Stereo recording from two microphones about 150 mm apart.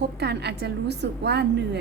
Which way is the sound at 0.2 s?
90° right.